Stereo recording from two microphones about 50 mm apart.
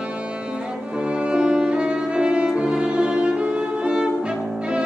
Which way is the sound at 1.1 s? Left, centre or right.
Centre.